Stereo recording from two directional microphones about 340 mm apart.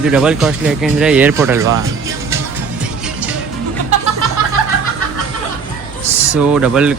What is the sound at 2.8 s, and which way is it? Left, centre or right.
Music, centre.